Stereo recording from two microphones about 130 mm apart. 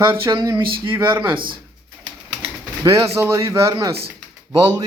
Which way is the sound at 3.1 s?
20° right (ahead or behind).